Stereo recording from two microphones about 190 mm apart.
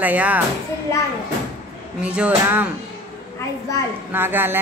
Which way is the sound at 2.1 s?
10° right (ahead or behind).